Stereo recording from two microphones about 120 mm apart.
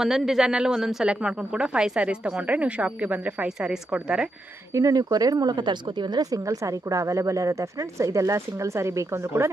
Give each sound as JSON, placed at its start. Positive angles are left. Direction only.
{"t": 0.0, "sound": "speech", "side_deg": -5}
{"t": 4.7, "sound": "speech", "side_deg": -30}